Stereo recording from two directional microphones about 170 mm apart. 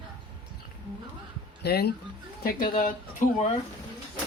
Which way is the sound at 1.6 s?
70° left (ahead or behind).